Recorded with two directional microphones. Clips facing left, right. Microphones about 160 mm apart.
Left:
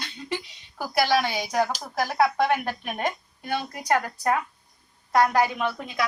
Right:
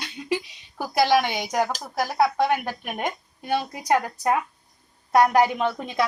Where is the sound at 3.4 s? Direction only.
25° right (ahead or behind).